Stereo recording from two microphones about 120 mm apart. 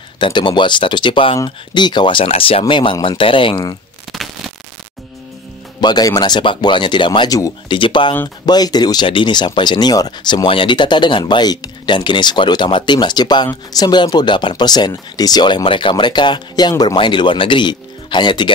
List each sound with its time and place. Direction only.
0.2 s speech: 40° left (ahead or behind)
4.1 s a sound: centre (ahead or behind)
5.8 s speech: 35° left (ahead or behind)
7.6 s speech: 45° left (ahead or behind)